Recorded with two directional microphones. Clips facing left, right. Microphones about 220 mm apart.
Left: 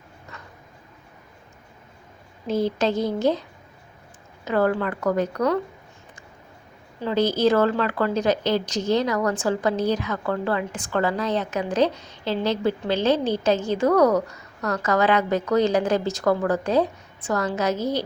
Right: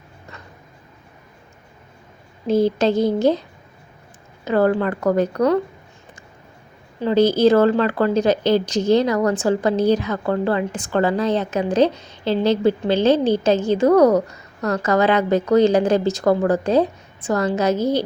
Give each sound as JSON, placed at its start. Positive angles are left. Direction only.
{"t": 2.5, "sound": "a woman's voice", "side_deg": -30}
{"t": 4.4, "sound": "a woman's voice", "side_deg": -30}
{"t": 7.0, "sound": "a woman's voice", "side_deg": -30}